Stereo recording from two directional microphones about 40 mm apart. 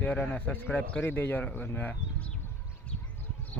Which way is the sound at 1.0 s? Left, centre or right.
Left.